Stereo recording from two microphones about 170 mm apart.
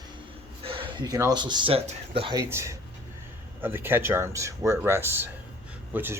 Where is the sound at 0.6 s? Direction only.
30° right (ahead or behind).